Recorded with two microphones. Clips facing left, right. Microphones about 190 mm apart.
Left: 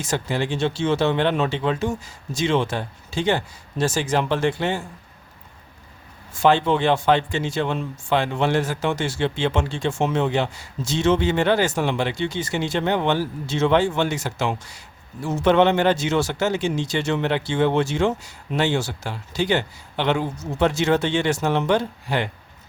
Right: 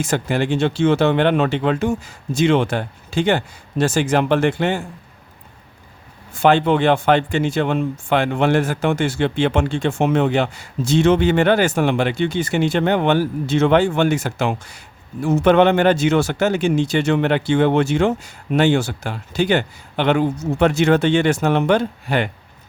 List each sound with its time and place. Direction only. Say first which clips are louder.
0.0 s speech: right 4 dB; 60° right (ahead or behind)
6.4 s speech: right 3 dB; 60° right (ahead or behind)